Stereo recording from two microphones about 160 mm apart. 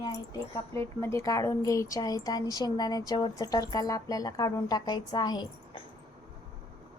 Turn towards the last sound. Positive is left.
turn(degrees=25)  # may be behind; listen again after turning